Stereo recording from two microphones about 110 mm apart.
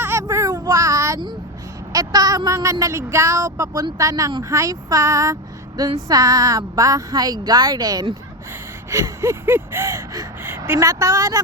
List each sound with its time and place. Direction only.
0.0 s a sound: 25° right (ahead or behind)
1.9 s a woman's voice: 35° right (ahead or behind)
8.9 s speech: 25° right (ahead or behind)